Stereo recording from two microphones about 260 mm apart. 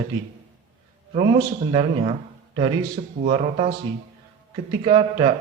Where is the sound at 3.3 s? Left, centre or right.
Right.